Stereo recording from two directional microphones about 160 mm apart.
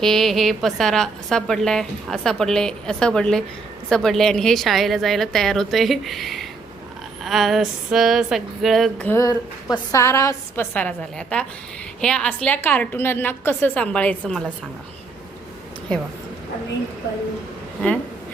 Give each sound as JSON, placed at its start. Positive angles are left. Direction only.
{"t": 0.0, "sound": "a woman's voice", "side_deg": 0}
{"t": 9.0, "sound": "a woman's voice", "side_deg": 20}